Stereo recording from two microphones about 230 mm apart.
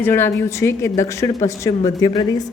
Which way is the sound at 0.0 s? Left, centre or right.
Centre.